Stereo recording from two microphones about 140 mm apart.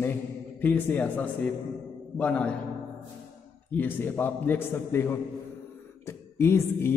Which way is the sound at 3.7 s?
15° left (ahead or behind).